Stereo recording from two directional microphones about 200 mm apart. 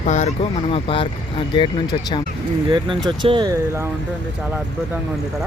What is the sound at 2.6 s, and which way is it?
Speech, 25° right (ahead or behind).